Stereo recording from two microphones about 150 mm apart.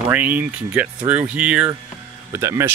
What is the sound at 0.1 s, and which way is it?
Speech, 10° right (ahead or behind).